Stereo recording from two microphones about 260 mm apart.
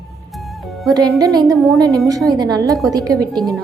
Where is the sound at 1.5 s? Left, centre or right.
Centre.